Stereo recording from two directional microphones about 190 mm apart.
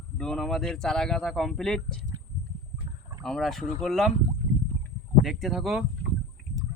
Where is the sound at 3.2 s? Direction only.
Centre (ahead or behind).